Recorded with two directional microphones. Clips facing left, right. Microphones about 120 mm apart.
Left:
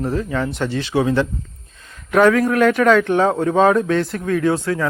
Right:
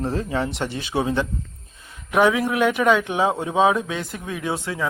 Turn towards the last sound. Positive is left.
turn(degrees=-20)  # may be behind; listen again after turning